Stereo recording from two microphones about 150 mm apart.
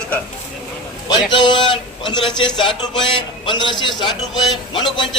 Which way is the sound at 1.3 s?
30° left (ahead or behind).